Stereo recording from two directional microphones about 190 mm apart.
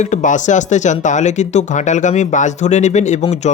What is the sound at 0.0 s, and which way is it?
Speech, 40° left (ahead or behind).